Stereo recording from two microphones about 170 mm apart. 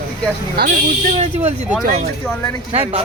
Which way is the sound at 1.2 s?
40° right (ahead or behind).